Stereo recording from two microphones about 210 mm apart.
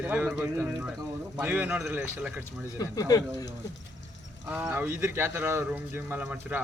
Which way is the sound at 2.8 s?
15° left (ahead or behind).